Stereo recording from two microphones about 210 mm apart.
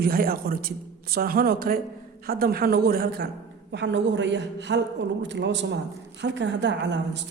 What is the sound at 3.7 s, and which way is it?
A woman's voice, 55° right (ahead or behind).